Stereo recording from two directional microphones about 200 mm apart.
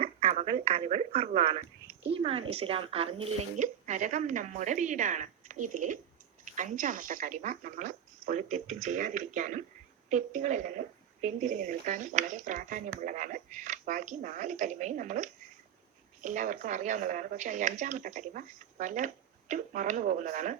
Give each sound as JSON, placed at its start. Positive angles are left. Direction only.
{"t": 0.0, "sound": "a woman's voice", "side_deg": -30}